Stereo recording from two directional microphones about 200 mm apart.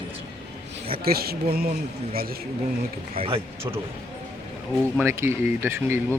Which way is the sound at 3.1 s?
30° right (ahead or behind).